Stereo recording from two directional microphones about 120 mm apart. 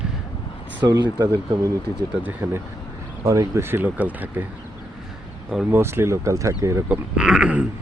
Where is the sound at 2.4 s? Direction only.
25° right (ahead or behind).